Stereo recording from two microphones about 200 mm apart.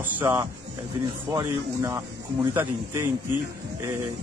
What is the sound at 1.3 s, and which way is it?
Speech, 20° right (ahead or behind).